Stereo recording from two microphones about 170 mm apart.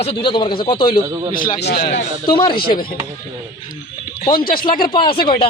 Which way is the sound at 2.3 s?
30° left (ahead or behind).